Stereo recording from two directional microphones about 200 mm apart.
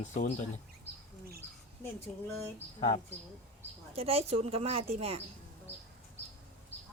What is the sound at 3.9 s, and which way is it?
Speech, 30° right (ahead or behind).